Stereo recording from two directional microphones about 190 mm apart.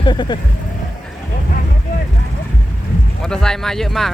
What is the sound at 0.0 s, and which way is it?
Speech, 25° left (ahead or behind).